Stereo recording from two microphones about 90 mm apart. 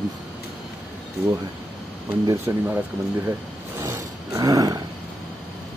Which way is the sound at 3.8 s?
40° right (ahead or behind).